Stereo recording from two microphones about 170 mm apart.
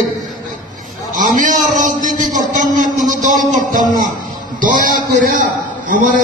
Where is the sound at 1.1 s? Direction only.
50° right (ahead or behind).